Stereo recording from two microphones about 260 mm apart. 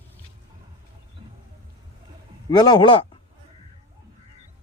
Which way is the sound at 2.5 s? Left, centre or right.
Centre.